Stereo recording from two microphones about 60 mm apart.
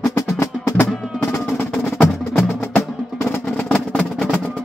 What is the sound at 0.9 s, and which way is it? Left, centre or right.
Music, centre.